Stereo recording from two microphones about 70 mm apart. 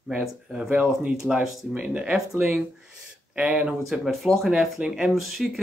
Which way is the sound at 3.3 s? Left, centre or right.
Centre.